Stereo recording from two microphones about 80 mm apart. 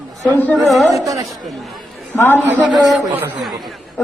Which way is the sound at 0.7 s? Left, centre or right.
Centre.